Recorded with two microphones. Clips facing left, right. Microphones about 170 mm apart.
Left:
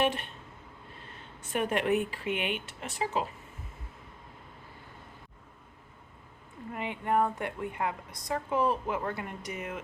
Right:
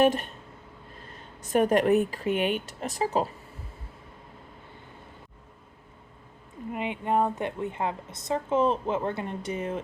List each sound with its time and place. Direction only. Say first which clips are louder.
0.0 s speech: right 7 dB; 40° right (ahead or behind)
6.7 s a woman's voice: right 3 dB; 20° right (ahead or behind)